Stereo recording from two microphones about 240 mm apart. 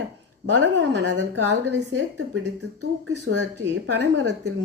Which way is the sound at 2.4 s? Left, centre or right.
Right.